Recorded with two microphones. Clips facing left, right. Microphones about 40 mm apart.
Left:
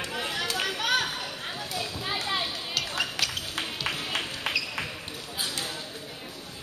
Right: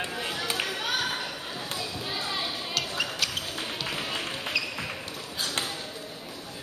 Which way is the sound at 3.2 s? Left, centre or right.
Left.